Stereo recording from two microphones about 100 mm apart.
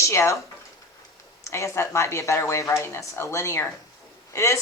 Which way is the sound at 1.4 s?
30° left (ahead or behind).